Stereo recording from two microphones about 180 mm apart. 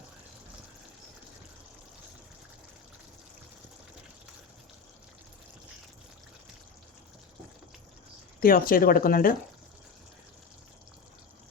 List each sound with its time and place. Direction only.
8.4 s speech: 55° left (ahead or behind)